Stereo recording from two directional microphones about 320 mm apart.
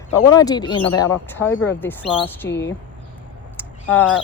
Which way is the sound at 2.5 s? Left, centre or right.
Left.